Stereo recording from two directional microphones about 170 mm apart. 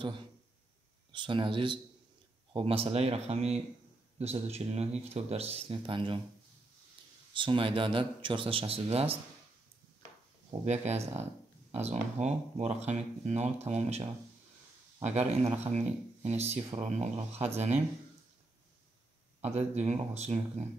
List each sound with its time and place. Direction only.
1.1 s speech: 30° right (ahead or behind)
7.3 s speech: 30° right (ahead or behind)
10.6 s speech: 40° right (ahead or behind)
15.0 s speech: 40° right (ahead or behind)
19.4 s speech: 40° right (ahead or behind)